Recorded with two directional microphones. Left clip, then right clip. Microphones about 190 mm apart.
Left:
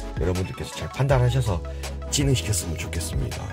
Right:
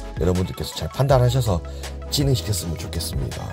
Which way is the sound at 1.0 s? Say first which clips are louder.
Right 5 dB; 35° right (ahead or behind).